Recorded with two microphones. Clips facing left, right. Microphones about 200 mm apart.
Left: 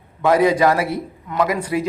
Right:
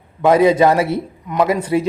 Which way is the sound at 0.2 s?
20° right (ahead or behind).